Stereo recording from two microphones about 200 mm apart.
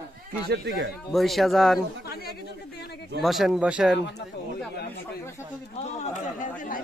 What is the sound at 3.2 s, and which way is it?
Speech, centre (ahead or behind).